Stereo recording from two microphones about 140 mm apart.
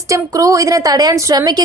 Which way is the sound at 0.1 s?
25° right (ahead or behind).